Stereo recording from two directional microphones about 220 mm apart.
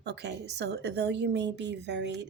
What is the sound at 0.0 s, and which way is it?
A woman's voice, 50° right (ahead or behind).